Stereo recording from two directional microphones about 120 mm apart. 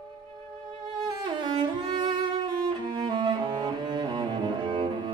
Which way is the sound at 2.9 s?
40° right (ahead or behind).